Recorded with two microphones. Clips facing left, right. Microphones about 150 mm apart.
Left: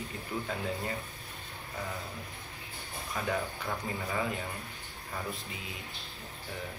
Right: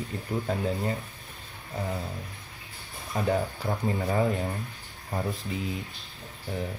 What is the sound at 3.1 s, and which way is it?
Speech, 40° right (ahead or behind).